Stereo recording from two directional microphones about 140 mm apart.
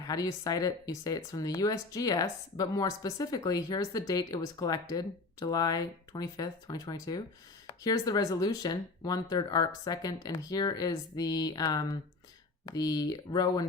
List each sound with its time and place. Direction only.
0.1 s speech: 25° left (ahead or behind)